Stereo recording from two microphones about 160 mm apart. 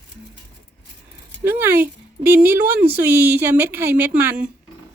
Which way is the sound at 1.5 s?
15° right (ahead or behind).